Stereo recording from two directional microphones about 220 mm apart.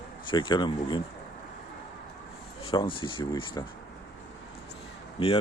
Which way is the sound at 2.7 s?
20° left (ahead or behind).